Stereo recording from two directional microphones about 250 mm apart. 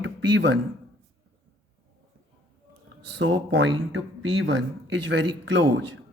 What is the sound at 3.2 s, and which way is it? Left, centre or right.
Speech, right.